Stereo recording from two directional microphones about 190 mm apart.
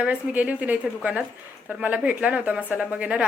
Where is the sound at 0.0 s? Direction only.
10° right (ahead or behind).